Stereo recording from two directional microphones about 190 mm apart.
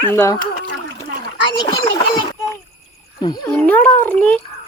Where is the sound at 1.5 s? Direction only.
20° left (ahead or behind).